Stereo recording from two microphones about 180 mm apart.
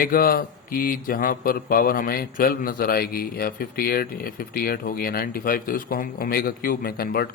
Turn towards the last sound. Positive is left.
turn(degrees=55)  # may be behind; listen again after turning